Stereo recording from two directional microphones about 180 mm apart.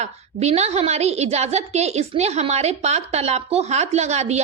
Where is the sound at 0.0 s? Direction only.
35° right (ahead or behind).